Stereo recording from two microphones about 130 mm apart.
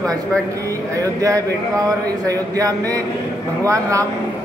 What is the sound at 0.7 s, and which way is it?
Speech, 25° right (ahead or behind).